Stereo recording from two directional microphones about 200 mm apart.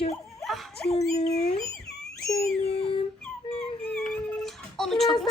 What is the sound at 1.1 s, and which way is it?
Speech, 35° left (ahead or behind).